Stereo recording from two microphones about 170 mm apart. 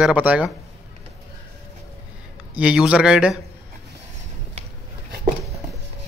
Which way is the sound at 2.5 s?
5° right (ahead or behind).